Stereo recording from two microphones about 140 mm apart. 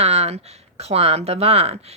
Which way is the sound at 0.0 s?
50° right (ahead or behind).